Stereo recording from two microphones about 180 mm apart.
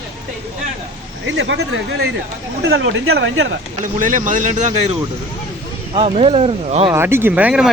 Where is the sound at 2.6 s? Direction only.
90° right; by 3.6 s 70° right (ahead or behind).